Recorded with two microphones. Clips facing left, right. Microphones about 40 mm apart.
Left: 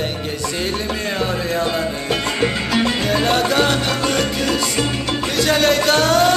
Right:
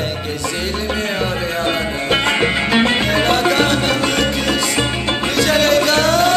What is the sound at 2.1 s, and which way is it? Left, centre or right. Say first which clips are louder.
Music: right 5 dB; right.